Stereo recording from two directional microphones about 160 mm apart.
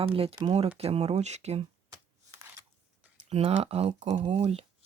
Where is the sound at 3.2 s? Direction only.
40° right (ahead or behind).